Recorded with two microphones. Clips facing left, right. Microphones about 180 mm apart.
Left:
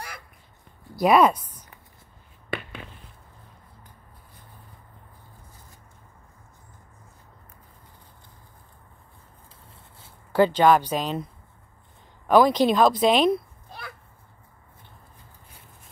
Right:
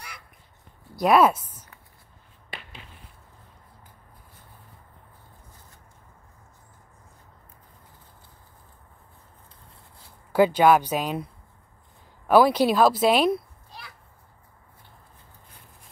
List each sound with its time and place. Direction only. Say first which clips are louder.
0.9 s speech: left 1 dB; centre (ahead or behind)
2.5 s a sound: left 10 dB; 60° left (ahead or behind)
10.3 s speech: even; 10° right (ahead or behind)
12.3 s speech: even; 10° right (ahead or behind)
13.7 s children playing: left 5 dB; 55° left (ahead or behind)